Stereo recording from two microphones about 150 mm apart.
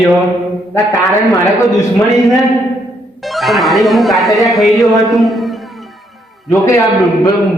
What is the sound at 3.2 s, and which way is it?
Speech, centre (ahead or behind).